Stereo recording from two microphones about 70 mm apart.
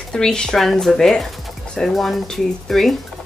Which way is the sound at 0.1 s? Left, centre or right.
Centre.